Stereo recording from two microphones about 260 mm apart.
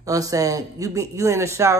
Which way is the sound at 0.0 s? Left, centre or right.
Centre.